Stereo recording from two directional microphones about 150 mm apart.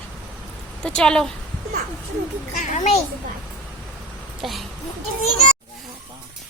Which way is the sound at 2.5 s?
55° left (ahead or behind).